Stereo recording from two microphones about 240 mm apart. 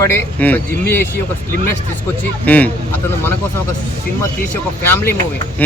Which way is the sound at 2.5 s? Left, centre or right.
Centre.